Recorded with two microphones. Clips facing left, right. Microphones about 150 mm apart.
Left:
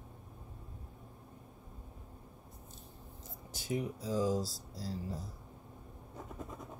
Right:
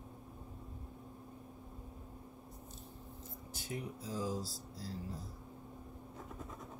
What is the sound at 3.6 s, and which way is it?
Speech, 90° left.